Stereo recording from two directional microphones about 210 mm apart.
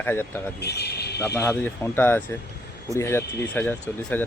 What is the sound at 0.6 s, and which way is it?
Speech, 50° left (ahead or behind).